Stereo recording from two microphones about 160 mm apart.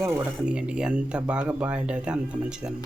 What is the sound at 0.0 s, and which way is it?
A man's voice, 15° right (ahead or behind).